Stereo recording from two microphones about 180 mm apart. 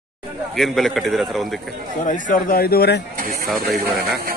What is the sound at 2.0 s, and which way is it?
Speech, 50° left (ahead or behind).